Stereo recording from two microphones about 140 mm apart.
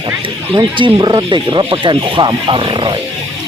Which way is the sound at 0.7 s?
35° right (ahead or behind).